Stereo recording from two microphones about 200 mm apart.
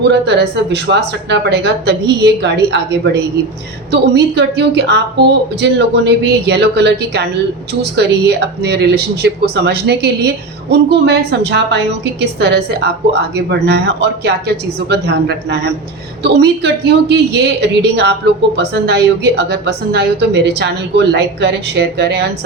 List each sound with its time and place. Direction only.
0.1 s speech: 55° right (ahead or behind)